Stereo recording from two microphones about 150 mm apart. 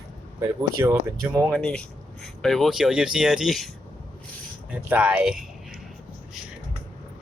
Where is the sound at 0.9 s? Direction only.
20° right (ahead or behind).